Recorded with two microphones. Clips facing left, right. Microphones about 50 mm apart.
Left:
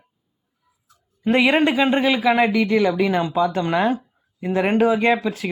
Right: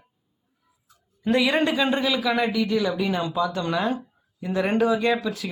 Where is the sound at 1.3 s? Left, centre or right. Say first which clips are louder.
Left 4 dB; left.